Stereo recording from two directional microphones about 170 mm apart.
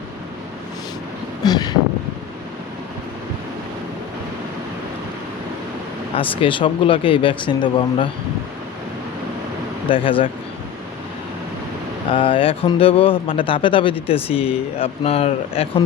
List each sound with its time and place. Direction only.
1.5 s a sound: 25° left (ahead or behind)
6.4 s speech: 30° left (ahead or behind)
9.9 s speech: 30° left (ahead or behind)
12.1 s speech: 30° left (ahead or behind)